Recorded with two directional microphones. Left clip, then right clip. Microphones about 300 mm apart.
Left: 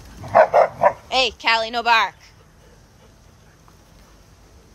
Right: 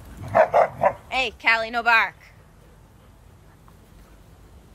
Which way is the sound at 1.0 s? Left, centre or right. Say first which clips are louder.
Left 3 dB; centre.